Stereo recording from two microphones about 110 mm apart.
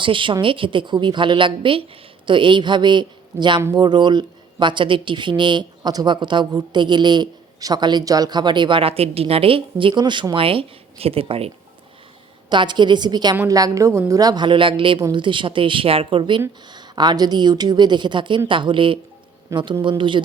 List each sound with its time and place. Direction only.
0.0 s speech: 50° right (ahead or behind)
12.5 s speech: 45° right (ahead or behind)
13.5 s a woman's voice: 30° right (ahead or behind); by 20.2 s 45° right (ahead or behind)